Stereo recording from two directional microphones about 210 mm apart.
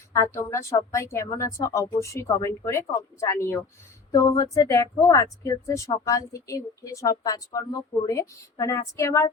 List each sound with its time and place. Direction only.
0.1 s a woman's voice: 15° left (ahead or behind)